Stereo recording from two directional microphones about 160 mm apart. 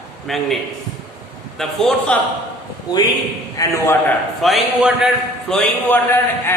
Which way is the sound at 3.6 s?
20° left (ahead or behind).